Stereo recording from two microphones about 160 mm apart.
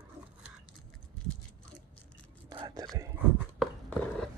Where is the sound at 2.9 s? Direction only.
20° right (ahead or behind).